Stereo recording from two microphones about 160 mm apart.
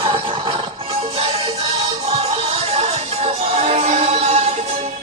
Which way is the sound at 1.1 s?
40° right (ahead or behind).